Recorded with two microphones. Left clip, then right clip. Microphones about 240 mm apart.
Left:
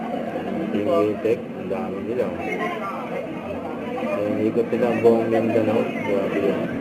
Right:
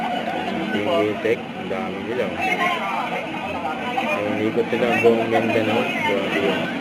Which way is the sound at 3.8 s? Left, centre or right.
Centre.